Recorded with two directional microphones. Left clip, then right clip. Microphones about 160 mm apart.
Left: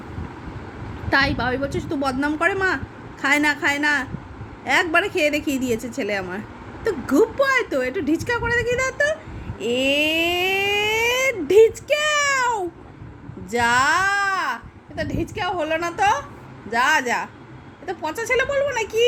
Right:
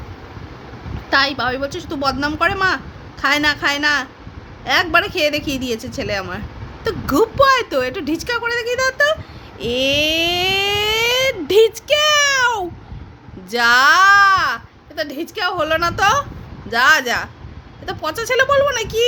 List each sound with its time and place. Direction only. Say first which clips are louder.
1.1 s a woman's voice: right 3 dB; 10° right (ahead or behind)